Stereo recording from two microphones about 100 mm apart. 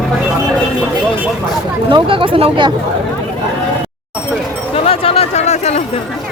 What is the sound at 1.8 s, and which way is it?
Speech, 60° right (ahead or behind).